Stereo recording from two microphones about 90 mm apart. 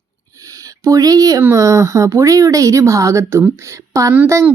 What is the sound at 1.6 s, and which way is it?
Speech, 40° right (ahead or behind).